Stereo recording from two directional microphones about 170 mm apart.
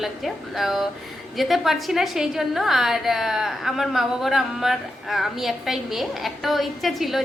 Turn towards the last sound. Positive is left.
turn(degrees=0)  # may be behind; listen again after turning